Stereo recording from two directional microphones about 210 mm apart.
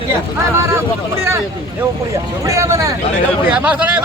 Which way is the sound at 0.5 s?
10° right (ahead or behind).